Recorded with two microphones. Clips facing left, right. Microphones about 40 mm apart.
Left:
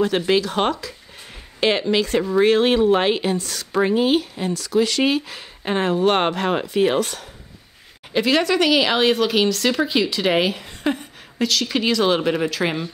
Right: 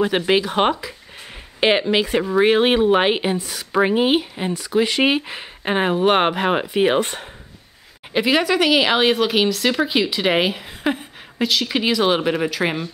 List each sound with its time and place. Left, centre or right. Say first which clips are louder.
0.0 s speech: right 1 dB; centre
8.1 s speech: right 1 dB; centre